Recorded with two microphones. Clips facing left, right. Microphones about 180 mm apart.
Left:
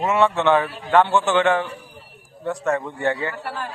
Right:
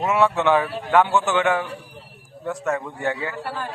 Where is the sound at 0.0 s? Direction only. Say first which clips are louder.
Left 1 dB; centre (ahead or behind).